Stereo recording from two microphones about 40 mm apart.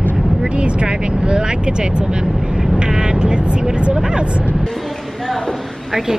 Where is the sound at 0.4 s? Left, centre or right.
Right.